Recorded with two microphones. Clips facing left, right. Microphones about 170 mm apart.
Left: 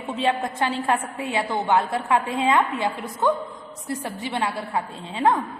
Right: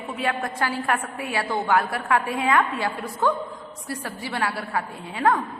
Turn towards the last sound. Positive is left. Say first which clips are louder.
# left 1 dB
turn(degrees=20)  # may be behind; listen again after turning